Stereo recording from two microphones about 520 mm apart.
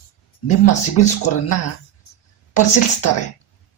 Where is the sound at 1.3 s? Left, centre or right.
Left.